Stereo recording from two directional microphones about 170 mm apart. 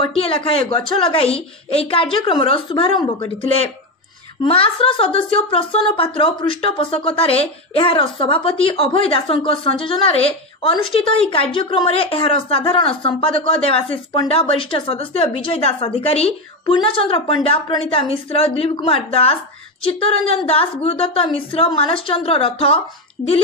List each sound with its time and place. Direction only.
0.0 s a woman's voice: 35° left (ahead or behind)